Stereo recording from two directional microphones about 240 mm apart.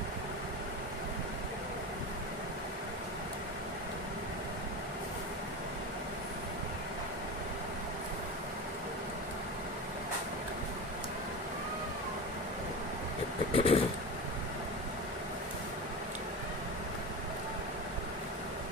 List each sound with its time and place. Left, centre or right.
13.6 s vehicle: left